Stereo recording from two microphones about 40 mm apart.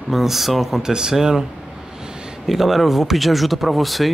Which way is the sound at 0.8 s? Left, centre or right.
Centre.